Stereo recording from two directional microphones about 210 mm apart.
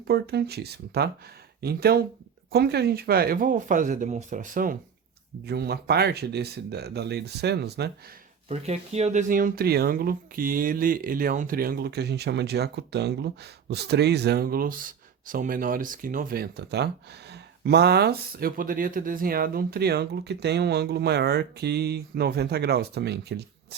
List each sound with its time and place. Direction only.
0.1 s speech: 50° right (ahead or behind)
8.4 s speech: 30° right (ahead or behind); by 23.4 s 50° right (ahead or behind)